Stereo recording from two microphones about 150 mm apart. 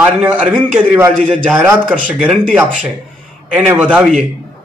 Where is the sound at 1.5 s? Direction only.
5° right (ahead or behind).